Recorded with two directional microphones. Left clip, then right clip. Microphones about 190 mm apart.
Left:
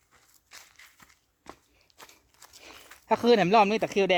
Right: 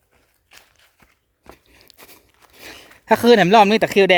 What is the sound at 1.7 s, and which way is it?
Biting, 50° right (ahead or behind).